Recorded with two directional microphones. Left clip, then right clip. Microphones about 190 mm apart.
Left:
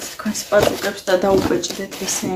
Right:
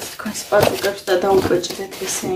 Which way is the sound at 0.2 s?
10° left (ahead or behind).